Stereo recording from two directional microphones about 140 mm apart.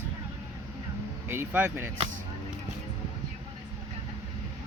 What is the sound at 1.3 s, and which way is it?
Speech, 15° right (ahead or behind).